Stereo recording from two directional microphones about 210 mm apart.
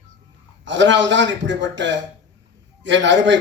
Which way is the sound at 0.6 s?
60° right (ahead or behind).